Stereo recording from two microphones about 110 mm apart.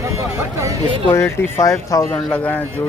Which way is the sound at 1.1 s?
25° left (ahead or behind).